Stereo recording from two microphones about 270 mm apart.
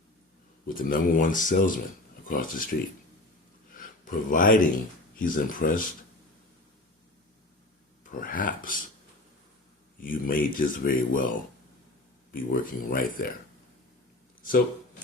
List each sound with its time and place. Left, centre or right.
0.7 s speech: left
3.8 s speech: left
8.2 s speech: left
10.0 s speech: left
14.4 s a sound: left